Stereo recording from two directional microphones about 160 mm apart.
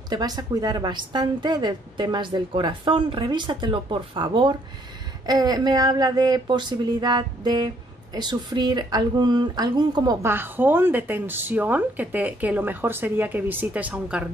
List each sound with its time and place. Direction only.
0.1 s speech: 25° right (ahead or behind)
10.2 s speech: 15° right (ahead or behind)